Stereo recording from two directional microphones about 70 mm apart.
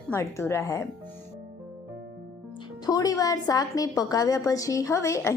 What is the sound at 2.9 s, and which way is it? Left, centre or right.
A woman's voice, left.